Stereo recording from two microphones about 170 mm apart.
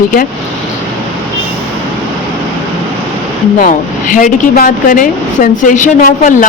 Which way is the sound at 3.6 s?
50° left (ahead or behind).